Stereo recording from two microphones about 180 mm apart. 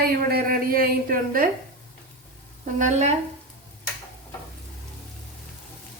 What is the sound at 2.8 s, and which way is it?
Speech, 40° right (ahead or behind).